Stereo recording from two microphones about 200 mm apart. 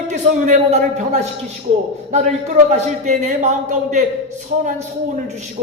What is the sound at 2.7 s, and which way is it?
Speech, 35° right (ahead or behind).